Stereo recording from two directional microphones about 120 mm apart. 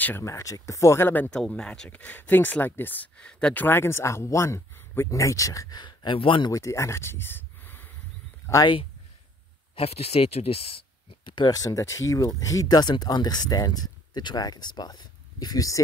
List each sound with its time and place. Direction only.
0.0 s speech: 20° left (ahead or behind)
1.3 s speech: 5° left (ahead or behind); by 6.5 s 45° left (ahead or behind)
6.5 s speech: 25° left (ahead or behind)
9.8 s speech: 60° left (ahead or behind); by 15.8 s 30° left (ahead or behind)